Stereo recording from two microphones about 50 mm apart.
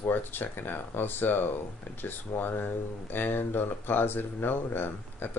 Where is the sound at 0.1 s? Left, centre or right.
Left.